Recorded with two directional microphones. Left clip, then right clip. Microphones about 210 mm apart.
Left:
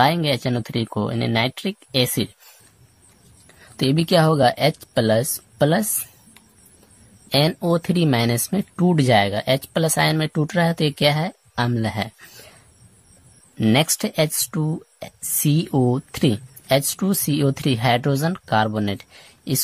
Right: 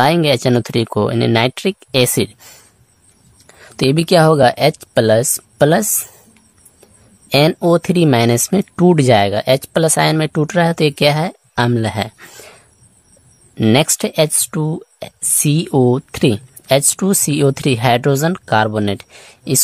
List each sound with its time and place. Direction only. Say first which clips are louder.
0.0 s speech: right 6 dB; 35° right (ahead or behind)
3.4 s speech: right 7 dB; 30° right (ahead or behind)
7.2 s speech: right 7 dB; 30° right (ahead or behind)
13.6 s speech: right 6 dB; 30° right (ahead or behind)